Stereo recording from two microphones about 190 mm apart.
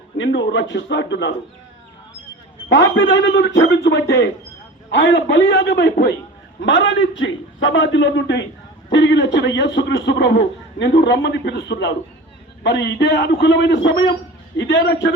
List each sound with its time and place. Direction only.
0.2 s a man's voice: 75° left (ahead or behind)
2.6 s a man's voice: 80° left; by 6.1 s 60° left (ahead or behind)
6.6 s a man's voice: 75° left (ahead or behind)